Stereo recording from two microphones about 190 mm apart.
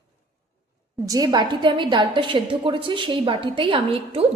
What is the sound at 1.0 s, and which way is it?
A woman's voice, 20° right (ahead or behind).